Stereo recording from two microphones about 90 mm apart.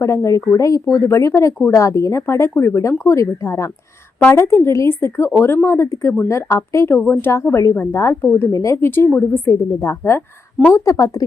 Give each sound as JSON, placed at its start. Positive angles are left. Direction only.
{"t": 0.0, "sound": "a woman's voice", "side_deg": 35}
{"t": 8.4, "sound": "a woman's voice", "side_deg": 35}
{"t": 10.9, "sound": "speech", "side_deg": 45}